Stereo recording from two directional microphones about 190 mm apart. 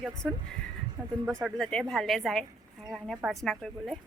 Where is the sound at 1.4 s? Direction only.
Centre (ahead or behind).